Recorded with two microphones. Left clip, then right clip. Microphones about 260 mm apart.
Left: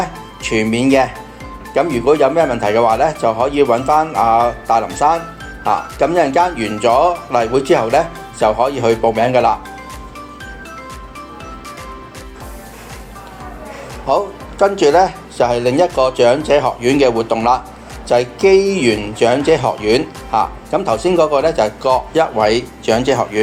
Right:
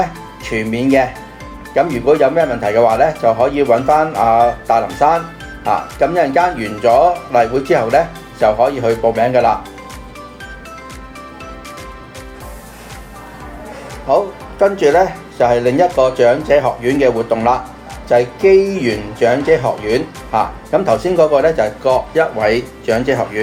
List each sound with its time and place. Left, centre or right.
0.0 s speech: centre
14.1 s speech: left